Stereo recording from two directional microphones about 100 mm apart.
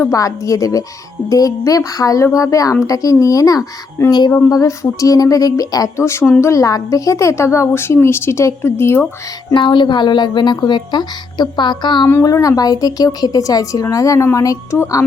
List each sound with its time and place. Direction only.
0.1 s speech: 35° left (ahead or behind)
9.6 s a woman's voice: 50° left (ahead or behind)
12.2 s speech: 35° left (ahead or behind)